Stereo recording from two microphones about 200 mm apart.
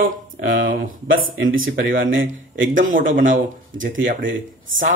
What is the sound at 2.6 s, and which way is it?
Speech, 40° right (ahead or behind).